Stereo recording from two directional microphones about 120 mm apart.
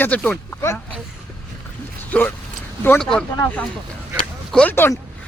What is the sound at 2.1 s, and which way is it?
A man's voice, 15° left (ahead or behind).